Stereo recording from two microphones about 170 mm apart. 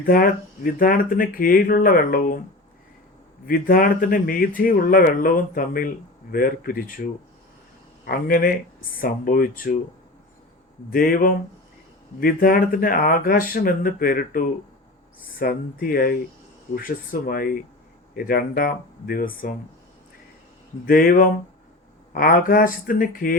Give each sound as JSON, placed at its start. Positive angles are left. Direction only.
{"t": 0.0, "sound": "speech", "side_deg": 55}
{"t": 3.4, "sound": "speech", "side_deg": 55}
{"t": 8.0, "sound": "speech", "side_deg": 60}
{"t": 10.9, "sound": "speech", "side_deg": 60}
{"t": 20.8, "sound": "speech", "side_deg": 60}